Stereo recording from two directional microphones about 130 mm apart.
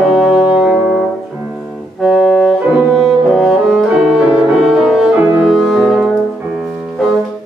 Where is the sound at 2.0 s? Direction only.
Centre (ahead or behind).